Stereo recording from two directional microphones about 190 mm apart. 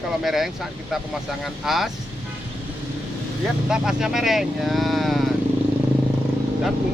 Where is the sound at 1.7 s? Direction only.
Centre (ahead or behind).